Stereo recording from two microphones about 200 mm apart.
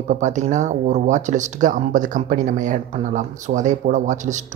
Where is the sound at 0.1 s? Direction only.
35° right (ahead or behind).